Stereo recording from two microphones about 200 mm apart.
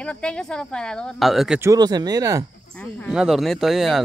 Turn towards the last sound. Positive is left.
turn(degrees=0)  # may be behind; listen again after turning